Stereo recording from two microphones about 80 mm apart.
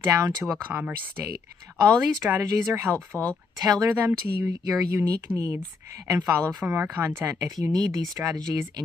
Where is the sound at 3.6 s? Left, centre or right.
Right.